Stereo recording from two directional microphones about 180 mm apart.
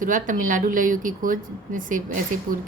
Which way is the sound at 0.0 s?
45° right (ahead or behind).